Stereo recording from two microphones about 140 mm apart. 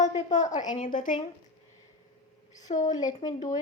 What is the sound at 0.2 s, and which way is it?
A woman's voice, 60° left (ahead or behind).